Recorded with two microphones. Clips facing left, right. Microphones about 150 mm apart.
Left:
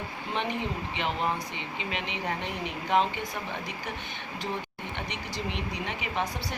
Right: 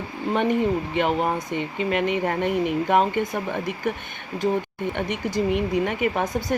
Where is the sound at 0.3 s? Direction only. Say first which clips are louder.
Right 10 dB; 50° right (ahead or behind).